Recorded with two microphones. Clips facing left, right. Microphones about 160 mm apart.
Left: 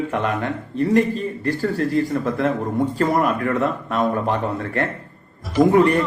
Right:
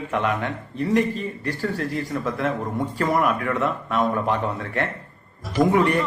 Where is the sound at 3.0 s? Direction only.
35° left (ahead or behind).